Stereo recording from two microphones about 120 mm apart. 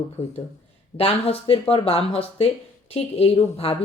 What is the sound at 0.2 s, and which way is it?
Speech, 60° left (ahead or behind).